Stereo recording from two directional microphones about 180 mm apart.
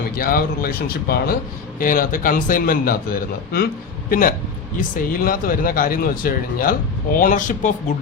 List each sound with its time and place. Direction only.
0.2 s speech: 55° left (ahead or behind)